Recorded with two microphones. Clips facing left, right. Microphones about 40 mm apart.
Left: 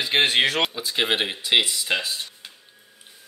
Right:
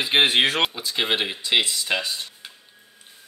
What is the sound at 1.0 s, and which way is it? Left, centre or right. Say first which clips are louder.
Speech: left 1 dB; centre.